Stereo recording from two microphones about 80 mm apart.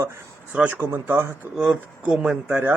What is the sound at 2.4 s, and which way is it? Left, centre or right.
Speech, right.